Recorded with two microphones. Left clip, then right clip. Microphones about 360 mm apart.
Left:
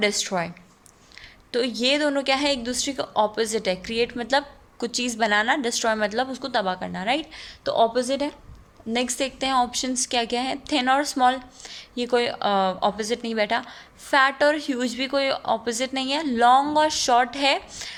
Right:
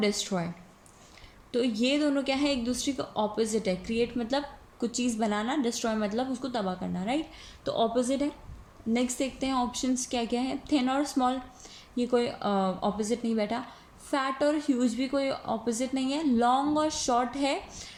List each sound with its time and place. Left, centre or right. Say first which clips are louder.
0.0 s a woman's voice: left 6 dB; left